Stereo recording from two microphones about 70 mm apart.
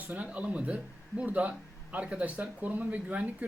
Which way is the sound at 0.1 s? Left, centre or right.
Right.